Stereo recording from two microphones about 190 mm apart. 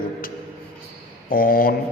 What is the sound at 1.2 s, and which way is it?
Speech, 50° left (ahead or behind).